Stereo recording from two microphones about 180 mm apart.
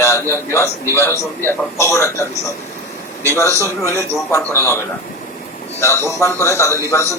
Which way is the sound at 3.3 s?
15° left (ahead or behind).